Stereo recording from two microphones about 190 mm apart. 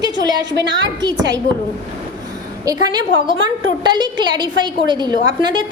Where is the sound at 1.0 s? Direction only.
20° right (ahead or behind).